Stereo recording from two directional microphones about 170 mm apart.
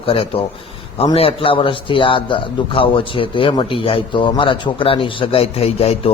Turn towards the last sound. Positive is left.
turn(degrees=35)  # may be behind; listen again after turning